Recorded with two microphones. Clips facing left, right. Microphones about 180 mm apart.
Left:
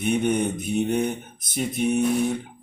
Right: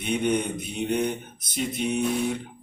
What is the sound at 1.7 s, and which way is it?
Mantra, 50° left (ahead or behind).